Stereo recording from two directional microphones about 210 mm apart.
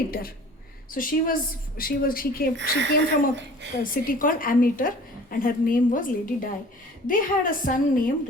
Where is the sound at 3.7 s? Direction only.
40° left (ahead or behind).